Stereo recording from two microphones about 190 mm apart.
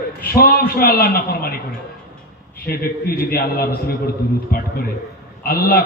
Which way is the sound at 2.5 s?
55° left (ahead or behind).